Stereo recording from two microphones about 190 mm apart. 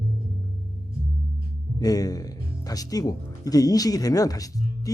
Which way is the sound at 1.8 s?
20° left (ahead or behind).